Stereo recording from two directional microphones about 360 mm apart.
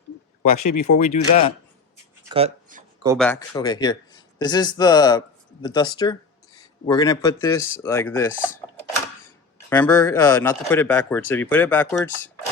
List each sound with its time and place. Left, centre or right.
0.5 s speech: left
0.9 s speech: centre
2.3 s a sound: centre
3.2 s speech: centre
9.6 s speech: centre